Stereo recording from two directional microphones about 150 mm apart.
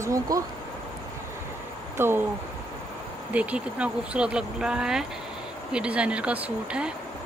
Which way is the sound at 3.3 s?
10° right (ahead or behind).